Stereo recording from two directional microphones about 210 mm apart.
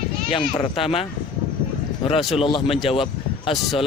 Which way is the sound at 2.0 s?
25° left (ahead or behind).